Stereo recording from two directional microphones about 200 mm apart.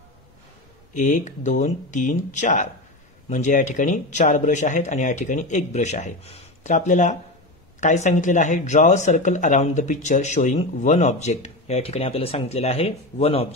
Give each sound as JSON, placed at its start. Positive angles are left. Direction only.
{"t": 0.9, "sound": "speech", "side_deg": 40}